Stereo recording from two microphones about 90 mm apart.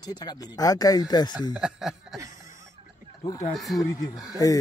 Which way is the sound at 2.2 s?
35° right (ahead or behind).